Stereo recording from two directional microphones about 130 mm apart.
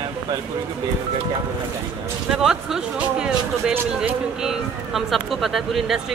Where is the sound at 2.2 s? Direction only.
5° right (ahead or behind).